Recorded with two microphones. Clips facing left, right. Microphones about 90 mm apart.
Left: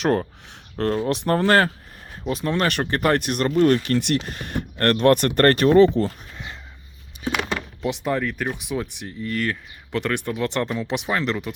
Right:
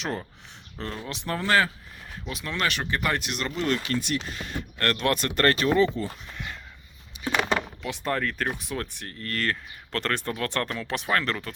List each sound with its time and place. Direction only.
0.0 s speech: 55° left (ahead or behind)
2.2 s speech: 40° left (ahead or behind)
3.8 s speech: 60° left (ahead or behind)
5.7 s speech: 70° left (ahead or behind)
6.3 s a sound: 30° left (ahead or behind)
8.0 s speech: 10° left (ahead or behind)